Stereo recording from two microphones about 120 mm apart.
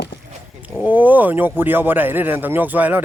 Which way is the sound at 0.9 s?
15° right (ahead or behind).